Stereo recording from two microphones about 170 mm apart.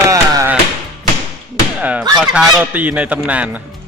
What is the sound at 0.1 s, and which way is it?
Music, 20° right (ahead or behind).